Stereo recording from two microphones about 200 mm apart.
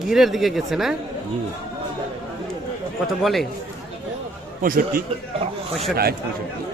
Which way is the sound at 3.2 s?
Centre (ahead or behind).